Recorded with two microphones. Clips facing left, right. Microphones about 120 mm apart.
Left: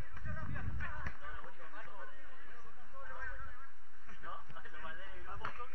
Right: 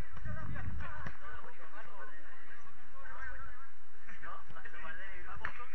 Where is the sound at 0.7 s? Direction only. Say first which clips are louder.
Even; 15° right (ahead or behind).